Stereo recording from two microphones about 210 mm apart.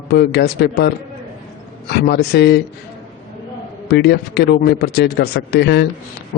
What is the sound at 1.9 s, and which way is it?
Speech, 50° left (ahead or behind).